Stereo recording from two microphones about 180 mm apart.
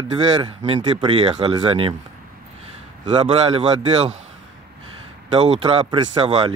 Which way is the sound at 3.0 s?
25° right (ahead or behind).